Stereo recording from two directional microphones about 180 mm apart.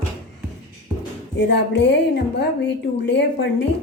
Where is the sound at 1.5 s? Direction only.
70° left (ahead or behind).